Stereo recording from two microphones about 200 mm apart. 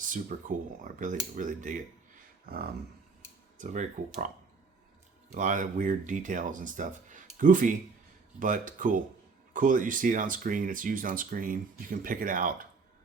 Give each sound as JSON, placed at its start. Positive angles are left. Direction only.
{"t": 0.1, "sound": "speech", "side_deg": -40}
{"t": 5.3, "sound": "speech", "side_deg": -40}